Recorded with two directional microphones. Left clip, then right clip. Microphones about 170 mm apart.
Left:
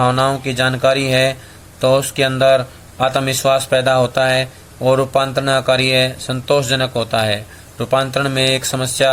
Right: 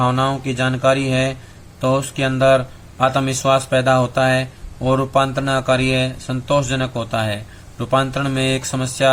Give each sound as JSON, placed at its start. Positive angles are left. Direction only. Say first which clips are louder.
{"t": 0.0, "sound": "speech", "louder": "left 3 dB", "side_deg": 15}